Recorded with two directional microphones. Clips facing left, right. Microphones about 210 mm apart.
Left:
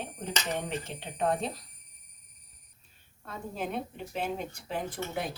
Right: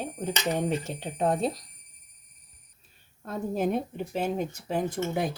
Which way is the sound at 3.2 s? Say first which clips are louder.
Right 8 dB; 45° right (ahead or behind).